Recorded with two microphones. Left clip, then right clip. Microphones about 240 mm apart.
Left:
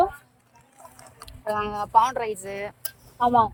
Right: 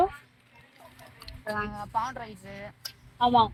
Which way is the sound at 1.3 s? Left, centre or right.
Left.